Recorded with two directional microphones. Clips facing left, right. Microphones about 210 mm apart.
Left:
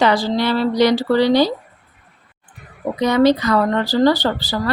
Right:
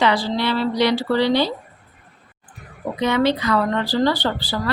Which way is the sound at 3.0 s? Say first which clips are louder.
Left 5 dB; 40° left (ahead or behind).